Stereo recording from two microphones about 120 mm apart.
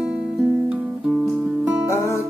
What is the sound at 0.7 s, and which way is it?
Music, 10° right (ahead or behind).